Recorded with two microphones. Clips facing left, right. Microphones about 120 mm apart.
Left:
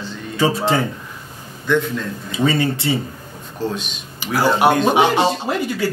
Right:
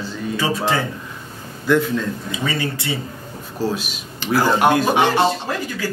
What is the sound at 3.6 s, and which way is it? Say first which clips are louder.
Speech: right 1 dB; 5° right (ahead or behind).